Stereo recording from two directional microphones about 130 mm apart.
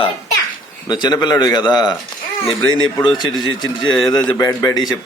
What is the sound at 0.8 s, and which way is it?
A man's voice, 35° left (ahead or behind).